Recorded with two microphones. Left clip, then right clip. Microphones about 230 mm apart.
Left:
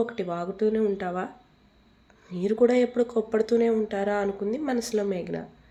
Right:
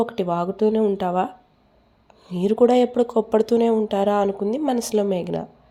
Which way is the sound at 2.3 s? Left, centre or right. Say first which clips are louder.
Right 5 dB; centre.